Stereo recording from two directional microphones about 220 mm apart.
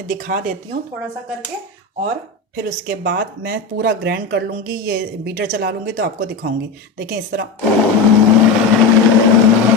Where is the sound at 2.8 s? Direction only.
45° right (ahead or behind).